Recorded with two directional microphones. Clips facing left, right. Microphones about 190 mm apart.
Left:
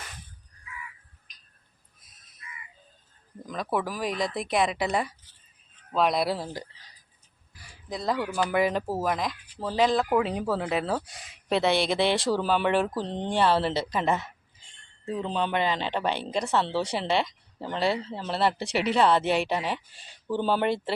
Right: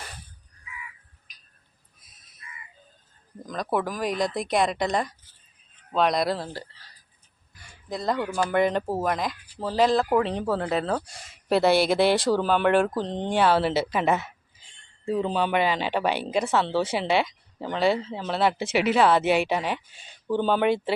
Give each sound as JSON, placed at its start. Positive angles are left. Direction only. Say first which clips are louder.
{"t": 3.4, "sound": "speech", "louder": "right 2 dB", "side_deg": 5}
{"t": 7.6, "sound": "a sound", "louder": "right 2 dB", "side_deg": 0}
{"t": 8.4, "sound": "speech", "louder": "right 3 dB", "side_deg": 5}